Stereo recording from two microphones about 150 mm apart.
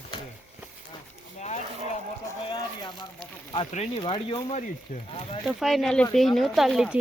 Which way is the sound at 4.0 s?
30° left (ahead or behind).